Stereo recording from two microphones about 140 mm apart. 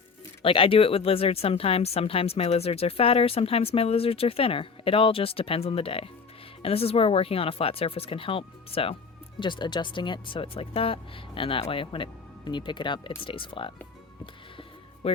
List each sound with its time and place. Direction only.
0.4 s speech: 40° left (ahead or behind)
15.0 s speech: 45° left (ahead or behind)